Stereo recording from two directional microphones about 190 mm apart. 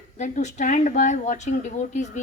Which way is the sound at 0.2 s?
40° left (ahead or behind).